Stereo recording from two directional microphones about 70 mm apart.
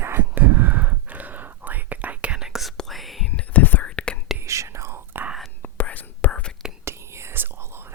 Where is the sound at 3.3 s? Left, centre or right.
Left.